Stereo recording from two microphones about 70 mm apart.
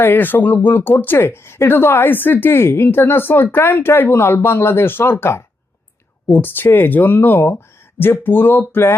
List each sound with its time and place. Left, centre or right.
0.0 s speech: left